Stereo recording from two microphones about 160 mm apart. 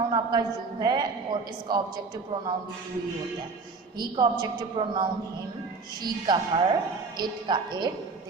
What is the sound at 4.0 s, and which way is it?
A woman's voice, 25° right (ahead or behind).